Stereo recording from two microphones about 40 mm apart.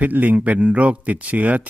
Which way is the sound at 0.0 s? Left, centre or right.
Right.